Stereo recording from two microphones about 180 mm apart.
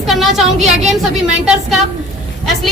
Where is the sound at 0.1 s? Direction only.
Centre (ahead or behind).